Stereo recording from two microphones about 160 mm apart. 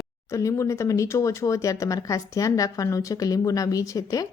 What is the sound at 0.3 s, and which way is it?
Speech, 20° left (ahead or behind).